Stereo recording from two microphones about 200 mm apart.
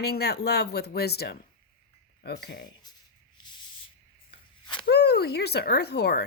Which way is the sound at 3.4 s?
20° left (ahead or behind).